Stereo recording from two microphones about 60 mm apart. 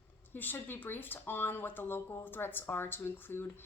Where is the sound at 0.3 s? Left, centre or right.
Left.